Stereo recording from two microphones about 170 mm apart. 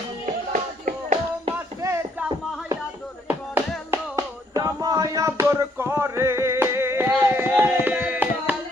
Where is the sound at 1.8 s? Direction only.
15° right (ahead or behind).